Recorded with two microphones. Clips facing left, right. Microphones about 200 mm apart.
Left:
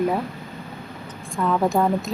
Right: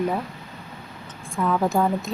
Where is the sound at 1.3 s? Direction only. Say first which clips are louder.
Left 1 dB; centre (ahead or behind).